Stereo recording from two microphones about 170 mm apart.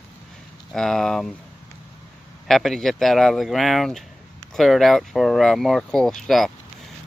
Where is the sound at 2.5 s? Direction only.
Centre (ahead or behind).